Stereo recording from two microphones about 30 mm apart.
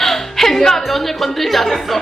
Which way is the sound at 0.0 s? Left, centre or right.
Centre.